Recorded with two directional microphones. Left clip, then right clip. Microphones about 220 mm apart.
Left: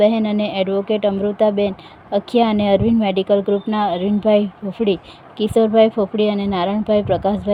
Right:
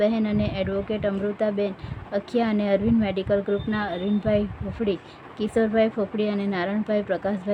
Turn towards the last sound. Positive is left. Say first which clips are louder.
# left 8 dB
turn(degrees=15)  # may be behind; listen again after turning